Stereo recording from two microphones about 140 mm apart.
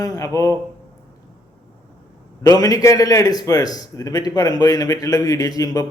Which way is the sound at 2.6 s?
25° left (ahead or behind).